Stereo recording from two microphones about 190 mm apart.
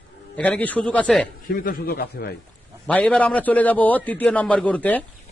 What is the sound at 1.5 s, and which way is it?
Speech, 50° left (ahead or behind).